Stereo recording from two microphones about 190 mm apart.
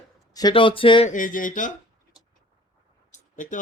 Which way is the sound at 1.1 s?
45° left (ahead or behind).